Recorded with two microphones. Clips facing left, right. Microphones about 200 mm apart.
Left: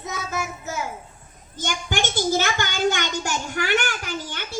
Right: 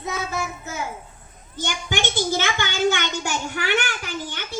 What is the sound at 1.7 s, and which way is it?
A child's voice, 45° left (ahead or behind).